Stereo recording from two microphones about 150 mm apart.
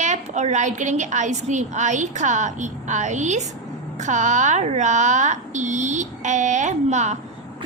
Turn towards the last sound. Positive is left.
turn(degrees=-50)  # may be behind; listen again after turning